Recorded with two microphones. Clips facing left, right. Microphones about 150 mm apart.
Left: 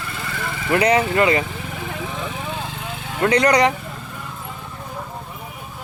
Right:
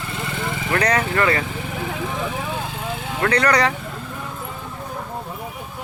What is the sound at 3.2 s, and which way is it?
Speech, 15° left (ahead or behind).